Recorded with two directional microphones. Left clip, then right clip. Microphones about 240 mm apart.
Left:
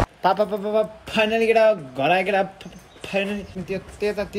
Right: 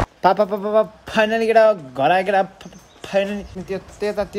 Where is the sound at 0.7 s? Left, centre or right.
Centre.